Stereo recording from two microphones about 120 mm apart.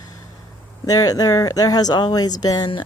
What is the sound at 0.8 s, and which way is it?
Speech, 30° left (ahead or behind).